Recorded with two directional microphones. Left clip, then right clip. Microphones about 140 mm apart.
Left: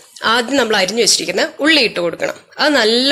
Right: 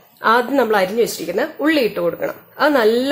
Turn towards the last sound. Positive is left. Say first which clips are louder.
# left 2 dB
turn(degrees=15)  # may be behind; listen again after turning